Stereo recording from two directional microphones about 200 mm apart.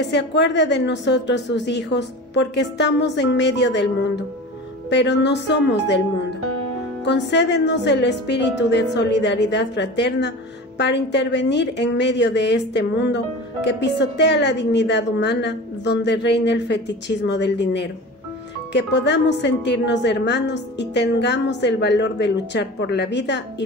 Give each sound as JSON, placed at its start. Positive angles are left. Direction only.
{"t": 0.0, "sound": "a woman's voice", "side_deg": 60}
{"t": 4.8, "sound": "a woman's voice", "side_deg": 60}
{"t": 7.1, "sound": "a woman's voice", "side_deg": 60}